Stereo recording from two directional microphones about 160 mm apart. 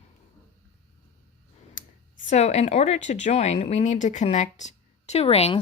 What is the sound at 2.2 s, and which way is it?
Speech, 45° left (ahead or behind).